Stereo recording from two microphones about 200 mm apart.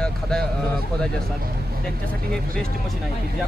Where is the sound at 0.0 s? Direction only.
5° left (ahead or behind).